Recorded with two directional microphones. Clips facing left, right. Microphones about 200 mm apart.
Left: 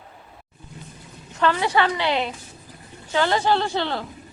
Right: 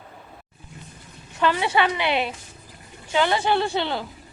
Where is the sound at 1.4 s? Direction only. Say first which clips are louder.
Left 1 dB; 15° right (ahead or behind).